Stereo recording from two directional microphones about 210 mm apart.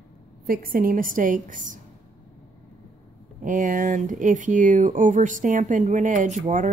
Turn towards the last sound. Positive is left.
turn(degrees=-35)  # may be behind; listen again after turning